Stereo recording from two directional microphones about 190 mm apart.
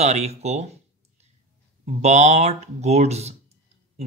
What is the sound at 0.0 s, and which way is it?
Speech, 35° right (ahead or behind).